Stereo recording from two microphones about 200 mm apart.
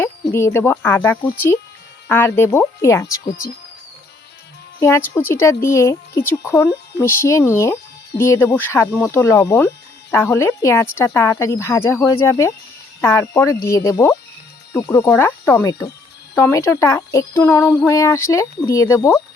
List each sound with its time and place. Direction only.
0.0 s speech: 15° left (ahead or behind)
4.8 s speech: 15° left (ahead or behind)